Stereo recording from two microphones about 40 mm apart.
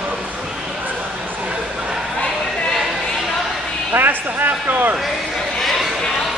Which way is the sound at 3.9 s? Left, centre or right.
Right.